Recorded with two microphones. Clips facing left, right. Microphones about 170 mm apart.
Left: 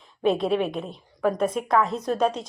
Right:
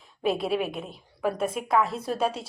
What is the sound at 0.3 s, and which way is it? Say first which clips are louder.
A woman's voice: left 4 dB; 5° right (ahead or behind).